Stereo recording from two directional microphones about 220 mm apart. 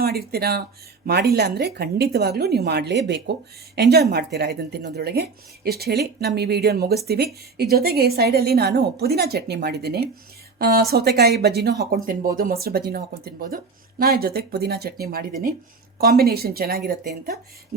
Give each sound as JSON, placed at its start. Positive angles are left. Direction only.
{"t": 0.0, "sound": "speech", "side_deg": -45}